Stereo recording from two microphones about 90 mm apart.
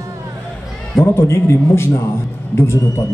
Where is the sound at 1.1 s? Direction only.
30° left (ahead or behind).